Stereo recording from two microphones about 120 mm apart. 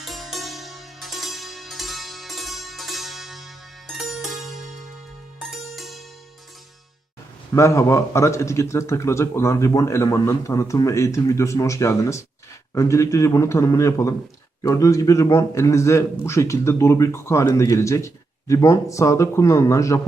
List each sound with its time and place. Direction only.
0.0 s music: centre (ahead or behind)
7.5 s a man's voice: 25° left (ahead or behind)